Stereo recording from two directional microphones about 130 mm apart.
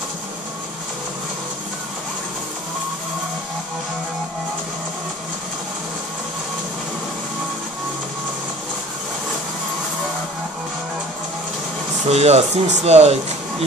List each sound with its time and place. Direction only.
12.1 s speech: 55° right (ahead or behind)